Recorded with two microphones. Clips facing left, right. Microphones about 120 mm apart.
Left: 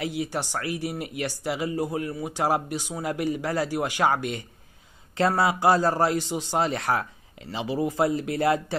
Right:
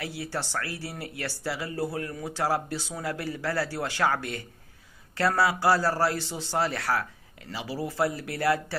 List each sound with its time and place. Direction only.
0.0 s a man's voice: 15° left (ahead or behind)